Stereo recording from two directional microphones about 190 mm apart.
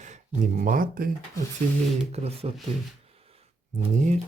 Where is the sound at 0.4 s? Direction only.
45° right (ahead or behind).